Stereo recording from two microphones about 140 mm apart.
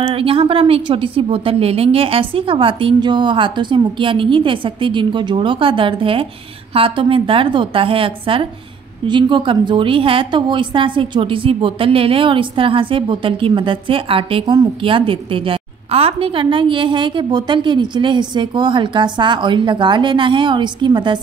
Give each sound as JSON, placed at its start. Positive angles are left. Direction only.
{"t": 0.0, "sound": "a woman's voice", "side_deg": -40}